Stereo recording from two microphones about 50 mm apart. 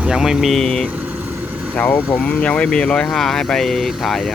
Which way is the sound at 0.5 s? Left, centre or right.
Centre.